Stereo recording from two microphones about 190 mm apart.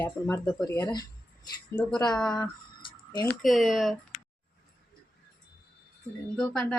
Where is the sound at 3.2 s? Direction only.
Centre (ahead or behind).